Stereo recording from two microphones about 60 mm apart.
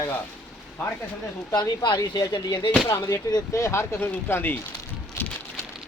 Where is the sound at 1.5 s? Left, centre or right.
Left.